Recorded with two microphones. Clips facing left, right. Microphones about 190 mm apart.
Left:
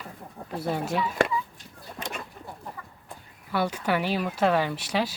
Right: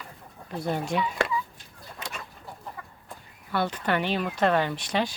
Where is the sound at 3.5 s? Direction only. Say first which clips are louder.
Left 1 dB; 10° left (ahead or behind).